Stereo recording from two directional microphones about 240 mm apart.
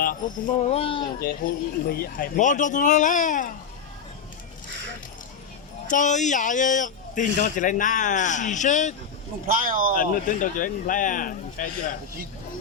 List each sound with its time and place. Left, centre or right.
0.0 s speech: left
1.4 s speech: left
5.9 s speech: left
9.5 s speech: right
9.9 s speech: left